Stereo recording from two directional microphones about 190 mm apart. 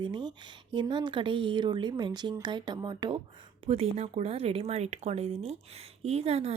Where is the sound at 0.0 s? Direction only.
25° right (ahead or behind).